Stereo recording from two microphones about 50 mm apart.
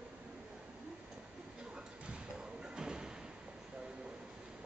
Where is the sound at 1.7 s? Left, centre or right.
Centre.